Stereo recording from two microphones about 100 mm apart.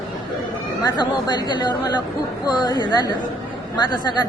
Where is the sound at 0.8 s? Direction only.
40° left (ahead or behind).